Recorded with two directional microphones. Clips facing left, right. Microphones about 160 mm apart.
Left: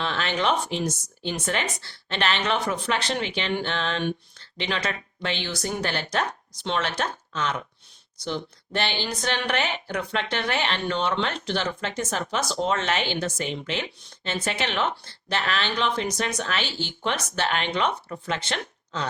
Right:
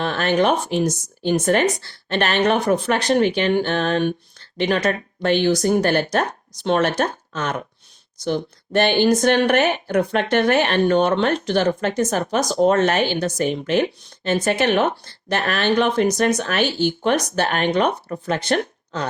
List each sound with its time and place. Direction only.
0.0 s speech: 50° right (ahead or behind)